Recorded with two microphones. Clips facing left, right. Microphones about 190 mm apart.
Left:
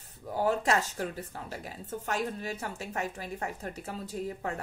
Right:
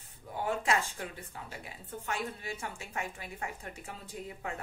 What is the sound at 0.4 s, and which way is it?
Speech, 40° left (ahead or behind).